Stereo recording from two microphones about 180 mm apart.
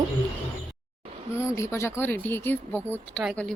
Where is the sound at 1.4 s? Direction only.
15° left (ahead or behind).